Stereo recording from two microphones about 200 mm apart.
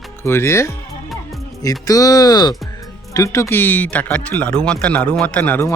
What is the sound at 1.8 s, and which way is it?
Speech, 20° left (ahead or behind).